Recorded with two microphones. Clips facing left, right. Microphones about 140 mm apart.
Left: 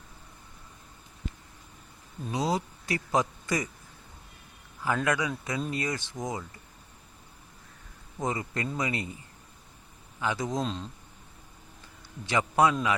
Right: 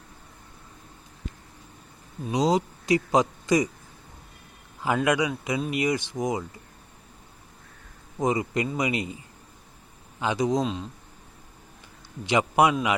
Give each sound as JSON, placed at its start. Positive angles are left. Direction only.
{"t": 2.2, "sound": "speech", "side_deg": -15}
{"t": 4.9, "sound": "speech", "side_deg": -15}
{"t": 8.2, "sound": "speech", "side_deg": -15}
{"t": 10.2, "sound": "speech", "side_deg": -20}
{"t": 12.2, "sound": "speech", "side_deg": -15}